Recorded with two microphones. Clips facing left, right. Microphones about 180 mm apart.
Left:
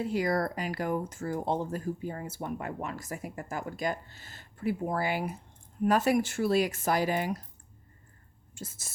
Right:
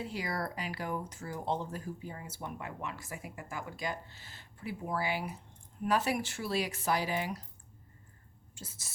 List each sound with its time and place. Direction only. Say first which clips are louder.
0.0 s speech: left 8 dB; 45° left (ahead or behind)
8.5 s speech: left 7 dB; 50° left (ahead or behind)